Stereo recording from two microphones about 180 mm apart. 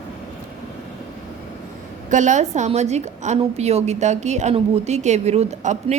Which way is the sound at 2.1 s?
45° right (ahead or behind).